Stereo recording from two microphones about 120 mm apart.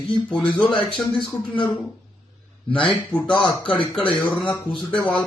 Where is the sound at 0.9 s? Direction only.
45° left (ahead or behind).